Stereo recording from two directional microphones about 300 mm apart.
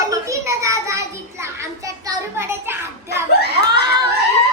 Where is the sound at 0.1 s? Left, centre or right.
Centre.